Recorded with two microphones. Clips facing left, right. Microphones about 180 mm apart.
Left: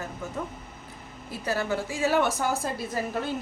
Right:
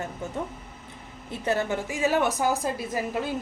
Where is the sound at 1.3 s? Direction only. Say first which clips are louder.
Right 2 dB; 25° right (ahead or behind).